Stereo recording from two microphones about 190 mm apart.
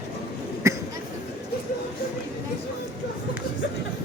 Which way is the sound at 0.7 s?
15° right (ahead or behind).